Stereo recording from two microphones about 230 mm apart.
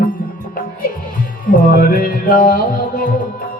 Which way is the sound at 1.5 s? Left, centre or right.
Left.